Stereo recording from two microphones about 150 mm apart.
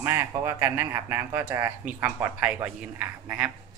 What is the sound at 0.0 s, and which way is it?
A man's voice, 20° right (ahead or behind).